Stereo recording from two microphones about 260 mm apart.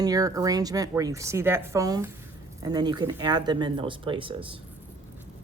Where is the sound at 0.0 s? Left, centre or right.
Centre.